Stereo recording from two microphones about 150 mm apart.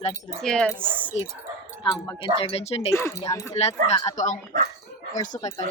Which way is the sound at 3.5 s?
45° left (ahead or behind).